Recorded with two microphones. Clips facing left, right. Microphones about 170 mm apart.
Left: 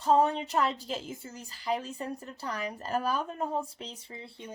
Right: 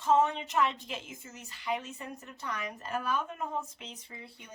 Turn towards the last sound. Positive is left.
turn(degrees=30)  # may be behind; listen again after turning